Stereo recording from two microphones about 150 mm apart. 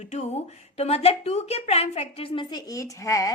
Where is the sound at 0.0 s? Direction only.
50° left (ahead or behind).